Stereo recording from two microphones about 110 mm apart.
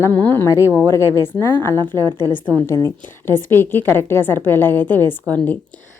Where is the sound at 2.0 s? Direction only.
35° right (ahead or behind).